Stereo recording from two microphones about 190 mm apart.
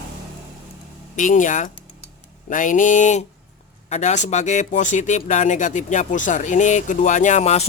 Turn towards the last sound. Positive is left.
turn(degrees=35)  # may be behind; listen again after turning